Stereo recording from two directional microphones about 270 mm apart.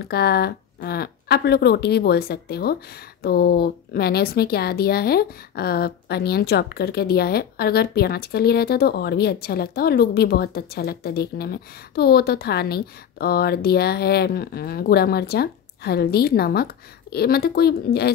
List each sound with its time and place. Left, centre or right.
0.0 s speech: left